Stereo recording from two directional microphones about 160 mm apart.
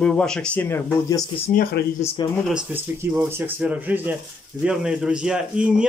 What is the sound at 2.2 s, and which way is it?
Speech, 30° left (ahead or behind).